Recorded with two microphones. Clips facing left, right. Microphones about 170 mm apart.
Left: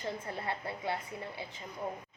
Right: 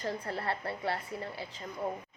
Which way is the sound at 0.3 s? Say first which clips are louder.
Right 3 dB; 20° left (ahead or behind).